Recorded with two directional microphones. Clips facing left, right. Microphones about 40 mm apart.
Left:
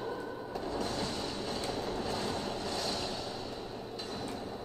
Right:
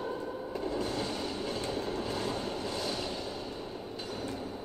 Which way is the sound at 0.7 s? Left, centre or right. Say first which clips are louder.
Right 2 dB; right.